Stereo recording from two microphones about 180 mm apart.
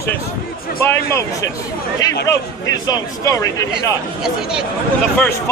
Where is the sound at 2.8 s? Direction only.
20° left (ahead or behind).